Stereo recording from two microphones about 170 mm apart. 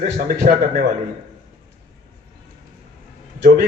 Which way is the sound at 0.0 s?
50° right (ahead or behind).